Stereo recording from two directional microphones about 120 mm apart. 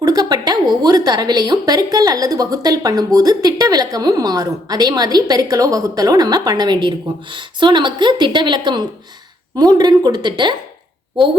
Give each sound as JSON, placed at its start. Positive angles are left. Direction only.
{"t": 0.0, "sound": "a woman's voice", "side_deg": -30}